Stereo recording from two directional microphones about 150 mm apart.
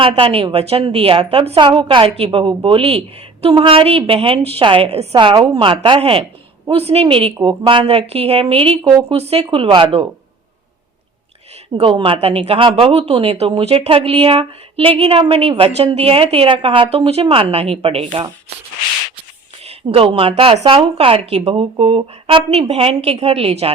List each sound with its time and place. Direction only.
0.0 s a woman's voice: 40° right (ahead or behind)
11.8 s a woman's voice: 35° right (ahead or behind)
19.6 s a woman's voice: 40° right (ahead or behind)